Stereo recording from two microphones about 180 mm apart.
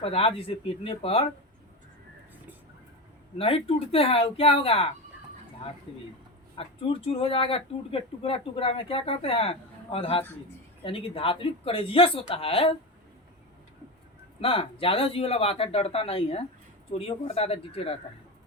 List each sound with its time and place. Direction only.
0.0 s speech: 30° left (ahead or behind)
3.3 s speech: 30° left (ahead or behind)
5.9 s speech: 30° left (ahead or behind)
14.4 s speech: 30° left (ahead or behind)